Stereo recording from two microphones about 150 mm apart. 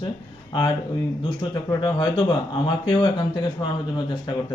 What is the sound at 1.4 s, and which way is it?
Speech, 30° left (ahead or behind).